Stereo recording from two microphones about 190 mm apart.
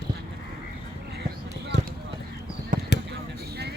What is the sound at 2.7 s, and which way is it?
Basketball bounce, 45° right (ahead or behind).